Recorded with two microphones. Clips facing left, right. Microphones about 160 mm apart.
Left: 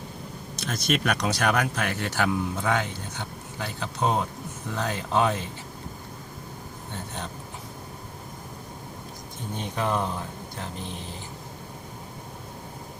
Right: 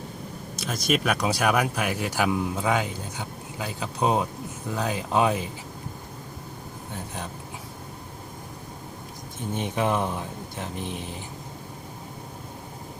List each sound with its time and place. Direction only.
0.5 s speech: 5° right (ahead or behind)
9.6 s speech: 20° right (ahead or behind)